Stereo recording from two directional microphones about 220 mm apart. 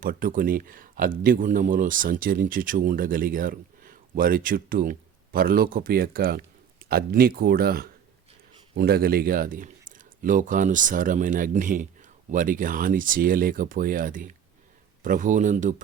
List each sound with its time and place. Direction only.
0.0 s speech: 40° right (ahead or behind)